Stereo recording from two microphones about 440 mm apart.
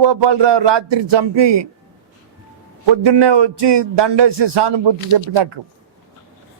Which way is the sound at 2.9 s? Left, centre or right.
Right.